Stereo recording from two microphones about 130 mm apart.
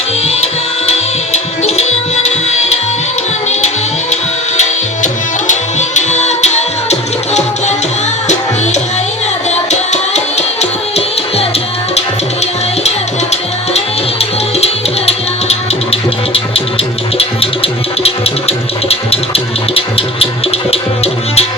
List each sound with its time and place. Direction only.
0.9 s tabla: 55° left (ahead or behind)
4.1 s tabla: 60° left (ahead or behind)
9.5 s music: 60° left (ahead or behind)
13.3 s music: 55° left (ahead or behind)